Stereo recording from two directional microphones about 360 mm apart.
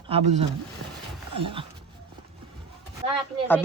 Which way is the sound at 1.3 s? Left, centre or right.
Right.